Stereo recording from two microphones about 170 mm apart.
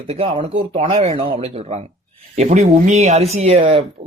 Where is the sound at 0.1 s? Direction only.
30° right (ahead or behind).